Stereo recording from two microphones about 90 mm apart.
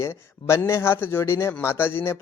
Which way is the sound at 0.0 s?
30° left (ahead or behind).